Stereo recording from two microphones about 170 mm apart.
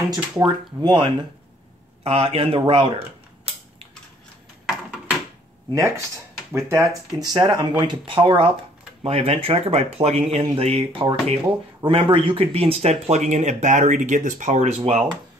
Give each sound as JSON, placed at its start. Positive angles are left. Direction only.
{"t": 0.1, "sound": "speech", "side_deg": -25}
{"t": 2.0, "sound": "speech", "side_deg": -35}
{"t": 5.8, "sound": "speech", "side_deg": -15}